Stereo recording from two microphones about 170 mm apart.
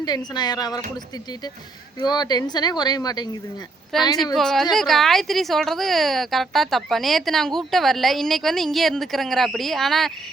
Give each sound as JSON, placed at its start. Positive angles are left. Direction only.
{"t": 0.0, "sound": "speech", "side_deg": 25}
{"t": 2.0, "sound": "speech", "side_deg": 25}
{"t": 3.9, "sound": "a woman's voice", "side_deg": 0}